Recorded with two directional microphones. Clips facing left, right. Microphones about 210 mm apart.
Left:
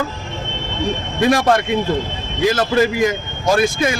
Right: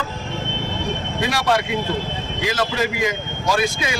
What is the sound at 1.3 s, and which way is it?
A man's voice, 50° left (ahead or behind).